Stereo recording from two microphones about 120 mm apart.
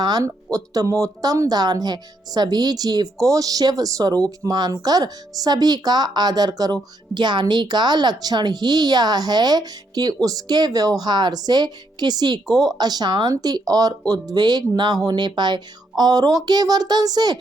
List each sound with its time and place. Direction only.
0.0 s speech: 30° right (ahead or behind)